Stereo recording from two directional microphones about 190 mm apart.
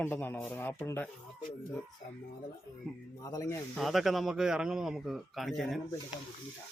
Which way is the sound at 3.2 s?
20° left (ahead or behind).